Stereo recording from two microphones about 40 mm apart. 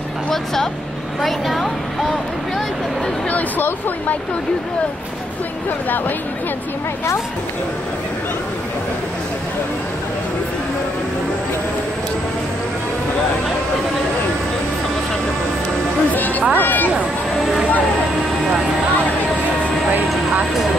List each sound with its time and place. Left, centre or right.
1.2 s speech: centre
16.1 s music: left
16.5 s speech: left